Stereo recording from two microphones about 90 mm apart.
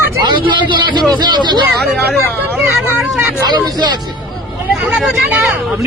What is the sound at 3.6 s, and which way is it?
Speech, 50° right (ahead or behind).